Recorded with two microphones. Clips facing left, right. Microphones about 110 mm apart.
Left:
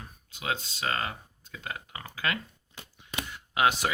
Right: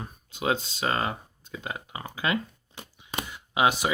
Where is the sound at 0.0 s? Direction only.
25° right (ahead or behind).